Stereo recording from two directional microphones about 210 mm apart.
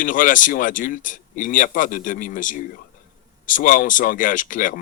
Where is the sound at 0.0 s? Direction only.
40° left (ahead or behind).